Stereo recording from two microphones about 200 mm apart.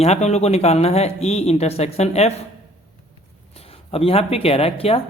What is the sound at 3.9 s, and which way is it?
A man's voice, 30° left (ahead or behind).